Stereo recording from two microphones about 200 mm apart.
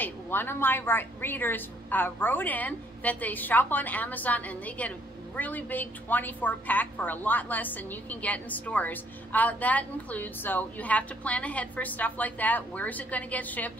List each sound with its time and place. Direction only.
0.0 s a woman's voice: 10° left (ahead or behind)